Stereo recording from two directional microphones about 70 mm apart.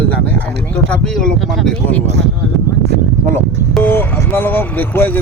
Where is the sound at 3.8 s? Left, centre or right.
Left.